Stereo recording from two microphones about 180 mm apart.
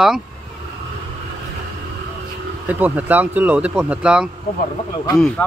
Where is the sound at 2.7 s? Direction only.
10° right (ahead or behind).